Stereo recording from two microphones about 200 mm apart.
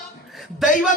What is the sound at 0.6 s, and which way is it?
Speech, 40° left (ahead or behind).